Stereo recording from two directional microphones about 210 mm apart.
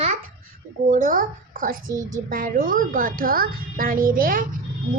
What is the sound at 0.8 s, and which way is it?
A woman's voice, 40° right (ahead or behind).